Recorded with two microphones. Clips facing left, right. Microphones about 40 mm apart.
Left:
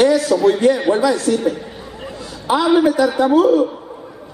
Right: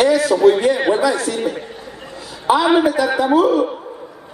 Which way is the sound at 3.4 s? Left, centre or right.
Centre.